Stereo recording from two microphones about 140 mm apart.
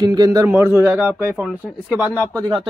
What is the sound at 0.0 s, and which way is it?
A man's voice, 30° right (ahead or behind).